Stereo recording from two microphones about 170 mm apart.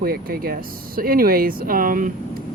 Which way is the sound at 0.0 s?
60° right (ahead or behind).